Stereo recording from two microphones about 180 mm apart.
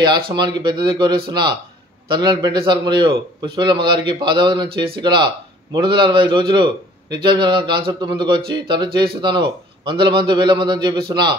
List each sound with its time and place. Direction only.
0.0 s a man's voice: 25° right (ahead or behind)